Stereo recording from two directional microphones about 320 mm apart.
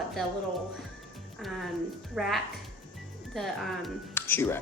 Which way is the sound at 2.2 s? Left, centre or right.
Centre.